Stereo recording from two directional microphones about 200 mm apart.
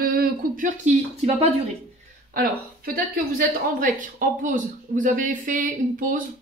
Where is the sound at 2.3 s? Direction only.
45° right (ahead or behind).